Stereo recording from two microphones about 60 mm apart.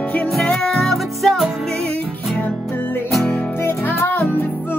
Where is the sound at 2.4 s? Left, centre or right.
Left.